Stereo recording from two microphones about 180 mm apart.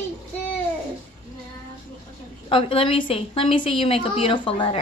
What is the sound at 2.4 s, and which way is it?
A woman's voice, 30° left (ahead or behind).